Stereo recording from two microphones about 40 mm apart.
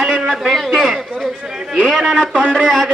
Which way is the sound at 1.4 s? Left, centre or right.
Centre.